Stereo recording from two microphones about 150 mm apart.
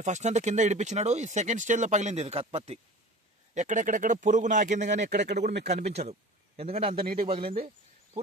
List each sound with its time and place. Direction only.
0.0 s speech: 50° right (ahead or behind)
3.5 s speech: 55° right (ahead or behind); by 7.5 s 40° right (ahead or behind)